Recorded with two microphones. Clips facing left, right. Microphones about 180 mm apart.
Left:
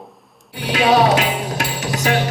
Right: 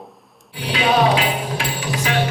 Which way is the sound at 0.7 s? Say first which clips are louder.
Left 3 dB; 45° left (ahead or behind).